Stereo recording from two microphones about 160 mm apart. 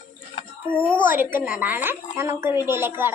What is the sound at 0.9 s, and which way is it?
Child singing, 10° right (ahead or behind).